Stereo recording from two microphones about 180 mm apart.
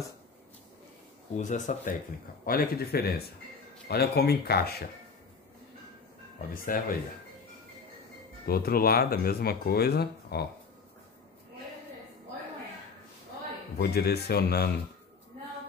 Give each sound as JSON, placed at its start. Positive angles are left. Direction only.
{"t": 1.3, "sound": "speech", "side_deg": 40}
{"t": 2.4, "sound": "speech", "side_deg": 55}
{"t": 6.5, "sound": "speech", "side_deg": 50}
{"t": 8.5, "sound": "speech", "side_deg": 55}
{"t": 13.7, "sound": "speech", "side_deg": 60}